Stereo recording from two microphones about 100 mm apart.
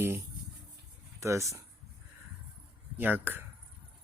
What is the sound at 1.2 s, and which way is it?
Speech, 30° right (ahead or behind).